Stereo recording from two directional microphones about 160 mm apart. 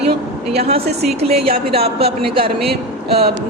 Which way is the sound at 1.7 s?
40° right (ahead or behind).